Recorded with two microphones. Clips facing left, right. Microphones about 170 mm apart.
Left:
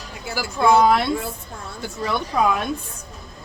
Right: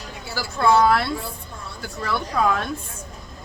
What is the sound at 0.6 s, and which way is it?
A woman's voice, 15° left (ahead or behind).